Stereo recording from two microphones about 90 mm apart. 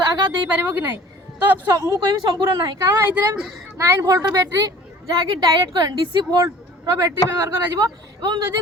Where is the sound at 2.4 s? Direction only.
45° right (ahead or behind).